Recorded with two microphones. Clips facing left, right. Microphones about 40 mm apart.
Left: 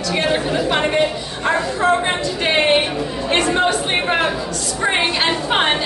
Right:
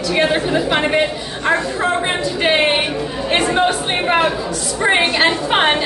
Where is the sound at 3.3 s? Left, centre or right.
Centre.